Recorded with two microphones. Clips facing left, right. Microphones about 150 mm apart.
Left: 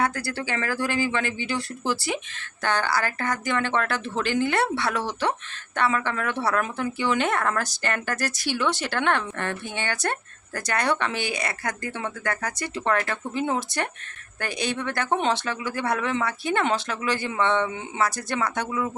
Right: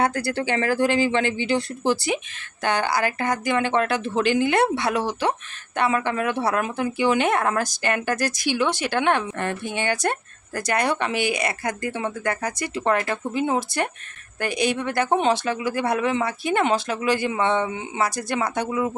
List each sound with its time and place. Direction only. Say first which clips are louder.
0.0 s speech: right 4 dB; 20° right (ahead or behind)